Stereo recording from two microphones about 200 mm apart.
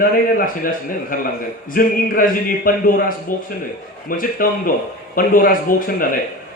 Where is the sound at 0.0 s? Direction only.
45° left (ahead or behind).